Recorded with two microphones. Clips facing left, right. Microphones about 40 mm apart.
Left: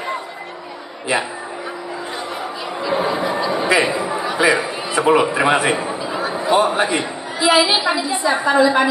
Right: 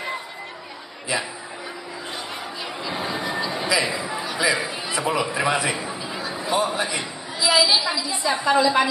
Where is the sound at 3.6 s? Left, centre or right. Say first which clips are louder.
Left 6 dB; left.